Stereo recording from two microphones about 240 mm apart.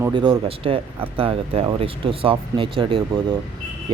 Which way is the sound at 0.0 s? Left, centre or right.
Right.